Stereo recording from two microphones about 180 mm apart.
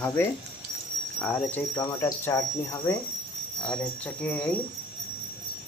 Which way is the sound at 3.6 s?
5° left (ahead or behind).